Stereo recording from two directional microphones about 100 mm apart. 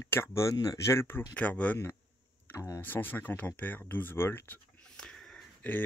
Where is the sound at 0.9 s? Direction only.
20° left (ahead or behind).